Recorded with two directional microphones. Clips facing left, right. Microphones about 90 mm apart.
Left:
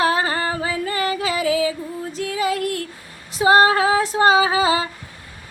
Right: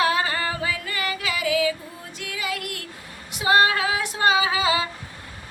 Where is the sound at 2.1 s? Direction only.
35° left (ahead or behind).